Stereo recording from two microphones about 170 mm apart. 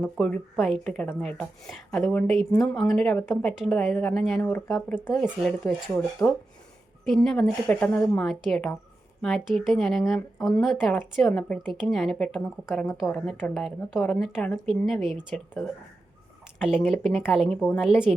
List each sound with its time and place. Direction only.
0.0 s speech: centre (ahead or behind)
4.9 s speech: 5° right (ahead or behind)
6.2 s speech: 15° left (ahead or behind)
7.0 s speech: centre (ahead or behind)